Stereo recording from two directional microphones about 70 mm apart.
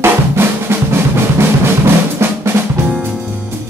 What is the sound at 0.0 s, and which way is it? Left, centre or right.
Drum, right.